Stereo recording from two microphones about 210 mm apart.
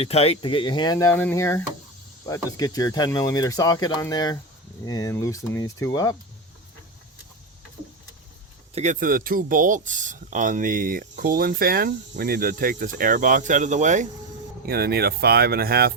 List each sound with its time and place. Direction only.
0.0 s speech: 30° left (ahead or behind)
8.7 s speech: 35° right (ahead or behind)
14.7 s speech: 50° right (ahead or behind)